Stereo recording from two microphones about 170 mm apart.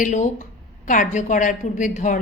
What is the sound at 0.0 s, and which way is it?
A woman's voice, 45° left (ahead or behind).